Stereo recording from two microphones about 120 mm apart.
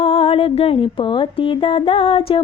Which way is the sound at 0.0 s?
50° left (ahead or behind).